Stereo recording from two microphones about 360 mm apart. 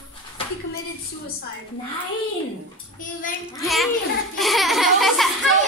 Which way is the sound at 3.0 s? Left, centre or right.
Left.